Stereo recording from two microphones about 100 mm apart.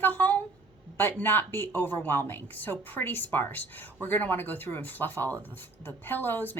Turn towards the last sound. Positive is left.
turn(degrees=20)  # may be behind; listen again after turning